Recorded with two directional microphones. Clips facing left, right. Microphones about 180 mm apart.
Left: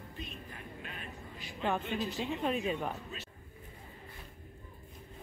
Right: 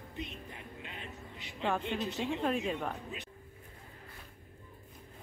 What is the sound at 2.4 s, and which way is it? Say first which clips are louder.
Speech: even; centre (ahead or behind).